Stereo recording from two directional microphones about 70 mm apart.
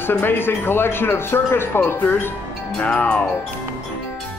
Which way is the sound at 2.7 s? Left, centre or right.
Centre.